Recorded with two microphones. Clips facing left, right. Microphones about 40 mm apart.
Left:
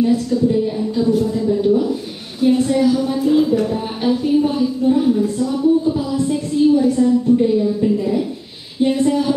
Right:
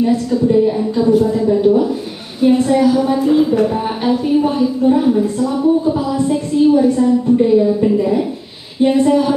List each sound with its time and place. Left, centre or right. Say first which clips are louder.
0.0 s a woman's voice: right 1 dB; centre